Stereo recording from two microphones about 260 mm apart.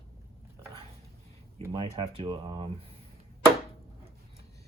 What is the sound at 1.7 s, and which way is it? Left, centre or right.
Speech, centre.